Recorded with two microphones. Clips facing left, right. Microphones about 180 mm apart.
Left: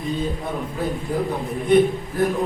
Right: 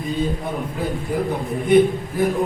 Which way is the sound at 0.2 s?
Centre (ahead or behind).